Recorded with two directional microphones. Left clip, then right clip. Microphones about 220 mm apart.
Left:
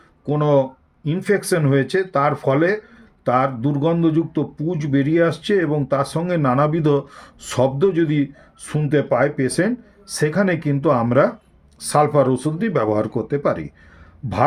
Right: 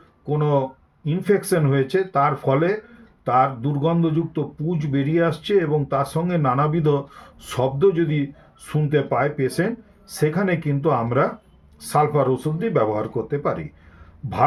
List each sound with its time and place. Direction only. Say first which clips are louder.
0.3 s speech: left 4 dB; 50° left (ahead or behind)